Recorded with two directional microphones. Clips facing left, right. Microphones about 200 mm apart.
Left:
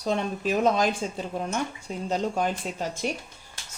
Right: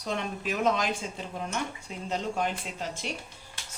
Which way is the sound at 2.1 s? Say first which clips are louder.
Left 4 dB; 40° left (ahead or behind).